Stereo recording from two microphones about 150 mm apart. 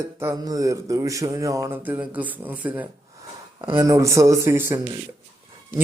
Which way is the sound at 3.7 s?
20° right (ahead or behind).